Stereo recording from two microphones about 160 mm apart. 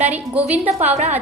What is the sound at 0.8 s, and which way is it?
Speech, 45° right (ahead or behind).